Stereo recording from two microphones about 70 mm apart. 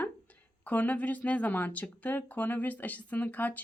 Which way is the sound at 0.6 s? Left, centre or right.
Left.